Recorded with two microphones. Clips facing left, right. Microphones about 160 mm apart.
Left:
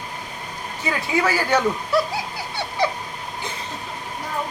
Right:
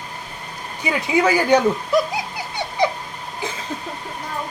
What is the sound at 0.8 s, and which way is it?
Speech, 20° right (ahead or behind).